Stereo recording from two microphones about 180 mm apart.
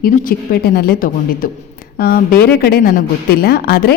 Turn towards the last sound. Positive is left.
turn(degrees=60)  # may be behind; listen again after turning